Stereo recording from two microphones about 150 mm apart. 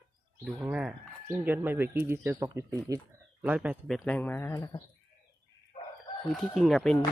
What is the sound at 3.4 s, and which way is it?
Speech, 10° right (ahead or behind).